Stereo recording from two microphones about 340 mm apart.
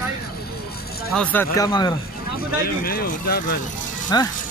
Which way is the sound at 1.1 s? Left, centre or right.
Centre.